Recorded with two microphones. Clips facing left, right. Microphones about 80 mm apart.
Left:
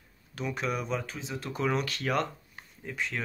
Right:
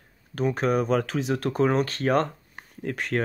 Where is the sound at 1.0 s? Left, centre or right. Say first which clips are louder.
Right 12 dB; right.